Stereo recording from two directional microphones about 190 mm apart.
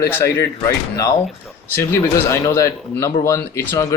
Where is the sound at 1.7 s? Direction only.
10° left (ahead or behind).